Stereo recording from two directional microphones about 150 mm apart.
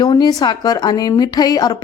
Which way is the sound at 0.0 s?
25° left (ahead or behind).